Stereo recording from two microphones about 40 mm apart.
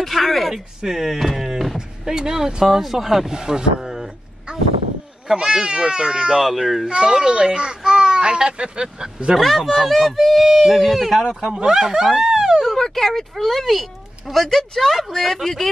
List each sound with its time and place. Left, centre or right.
0.0 s speech: centre
0.8 s speech: centre
1.5 s a sound: centre
2.1 s speech: centre
3.3 s speech: centre
5.3 s a child's voice: centre
6.4 s speech: centre
6.9 s a child's voice: right
9.4 s speech: centre
12.6 s speech: centre